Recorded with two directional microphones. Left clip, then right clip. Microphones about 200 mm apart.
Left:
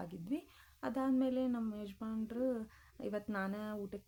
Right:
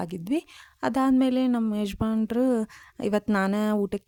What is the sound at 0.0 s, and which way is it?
A woman's voice, 55° right (ahead or behind).